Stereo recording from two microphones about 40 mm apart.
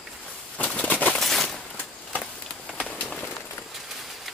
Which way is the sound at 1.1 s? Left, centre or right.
Centre.